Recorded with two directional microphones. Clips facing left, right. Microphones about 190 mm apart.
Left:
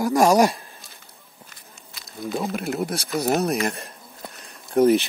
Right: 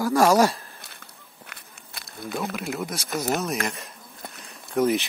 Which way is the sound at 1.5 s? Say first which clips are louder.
Right 1 dB; 60° right (ahead or behind).